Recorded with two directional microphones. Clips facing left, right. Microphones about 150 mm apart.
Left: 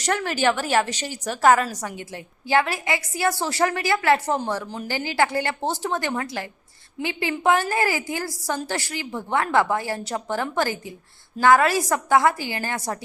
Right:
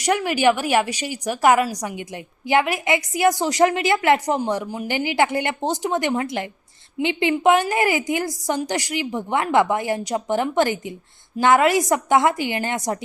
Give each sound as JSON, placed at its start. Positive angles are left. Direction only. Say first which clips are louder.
{"t": 0.0, "sound": "a woman's voice", "louder": "right 4 dB", "side_deg": -15}